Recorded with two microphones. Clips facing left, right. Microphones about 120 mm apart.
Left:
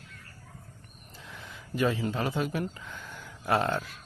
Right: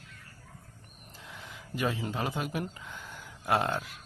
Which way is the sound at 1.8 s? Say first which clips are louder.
Left 4 dB; 15° right (ahead or behind).